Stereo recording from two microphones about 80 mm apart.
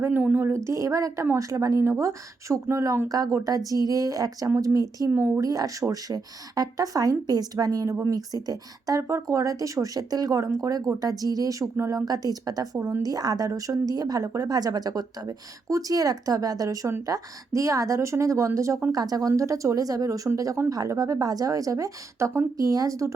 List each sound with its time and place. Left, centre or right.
0.3 s speech: right
5.1 s speech: right
5.4 s speech: right
9.0 s speech: right
18.9 s speech: right